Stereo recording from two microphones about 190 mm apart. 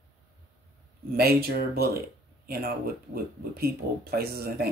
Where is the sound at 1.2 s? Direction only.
55° right (ahead or behind).